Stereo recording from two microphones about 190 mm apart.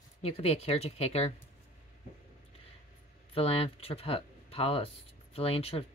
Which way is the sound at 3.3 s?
30° left (ahead or behind).